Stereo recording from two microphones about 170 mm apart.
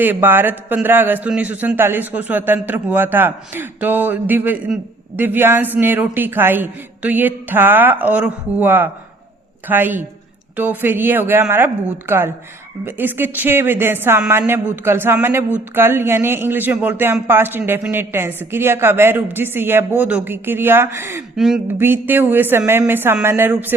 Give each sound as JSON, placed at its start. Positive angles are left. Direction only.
{"t": 0.0, "sound": "speech", "side_deg": -10}
{"t": 21.3, "sound": "speech", "side_deg": 0}
{"t": 21.8, "sound": "speech", "side_deg": -10}